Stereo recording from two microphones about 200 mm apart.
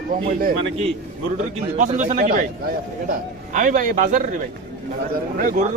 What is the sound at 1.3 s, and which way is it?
Speech, 40° right (ahead or behind).